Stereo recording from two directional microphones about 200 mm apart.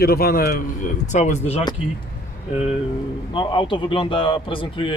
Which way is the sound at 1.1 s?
35° left (ahead or behind).